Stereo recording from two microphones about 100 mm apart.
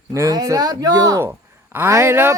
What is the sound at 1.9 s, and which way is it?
Speech, 25° right (ahead or behind).